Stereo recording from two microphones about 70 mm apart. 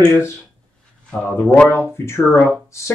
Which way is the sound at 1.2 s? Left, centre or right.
Left.